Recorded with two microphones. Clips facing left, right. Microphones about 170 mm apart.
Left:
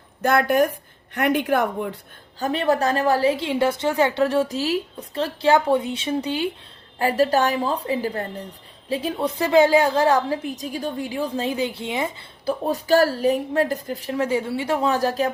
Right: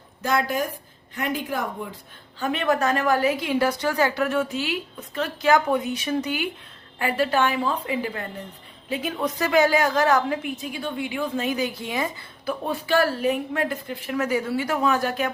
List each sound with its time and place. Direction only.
0.2 s a woman's voice: 60° left (ahead or behind)
2.4 s a woman's voice: 35° left (ahead or behind)